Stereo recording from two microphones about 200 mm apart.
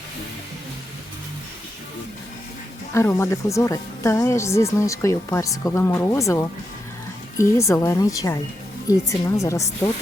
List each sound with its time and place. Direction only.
2.9 s speech: 15° left (ahead or behind)